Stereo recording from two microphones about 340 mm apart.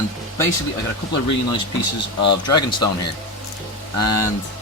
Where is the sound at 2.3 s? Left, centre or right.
Left.